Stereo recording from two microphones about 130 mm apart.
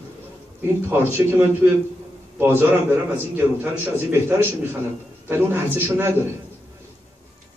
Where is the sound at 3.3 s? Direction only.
15° right (ahead or behind).